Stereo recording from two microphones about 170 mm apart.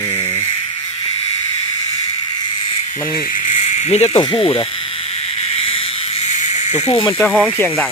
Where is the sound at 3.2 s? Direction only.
50° left (ahead or behind); by 7.1 s 35° left (ahead or behind).